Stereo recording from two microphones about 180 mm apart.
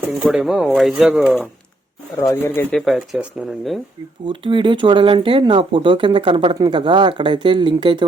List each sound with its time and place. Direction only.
0.2 s speech: centre (ahead or behind)
2.2 s speech: 15° left (ahead or behind)
2.7 s speech: centre (ahead or behind)
4.3 s speech: 30° right (ahead or behind)